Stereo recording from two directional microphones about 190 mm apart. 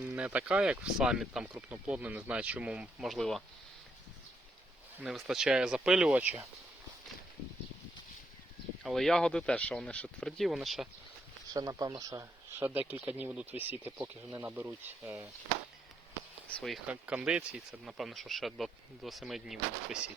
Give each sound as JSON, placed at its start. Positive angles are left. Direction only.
{"t": 0.0, "sound": "speech", "side_deg": -5}
{"t": 4.9, "sound": "speech", "side_deg": 0}
{"t": 8.8, "sound": "speech", "side_deg": 0}
{"t": 11.5, "sound": "speech", "side_deg": -20}
{"t": 16.5, "sound": "speech", "side_deg": 5}